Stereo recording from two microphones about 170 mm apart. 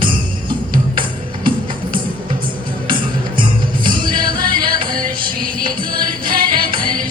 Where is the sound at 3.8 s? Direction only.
55° right (ahead or behind).